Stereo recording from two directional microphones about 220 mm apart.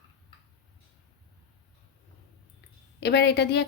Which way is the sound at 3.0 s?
50° left (ahead or behind).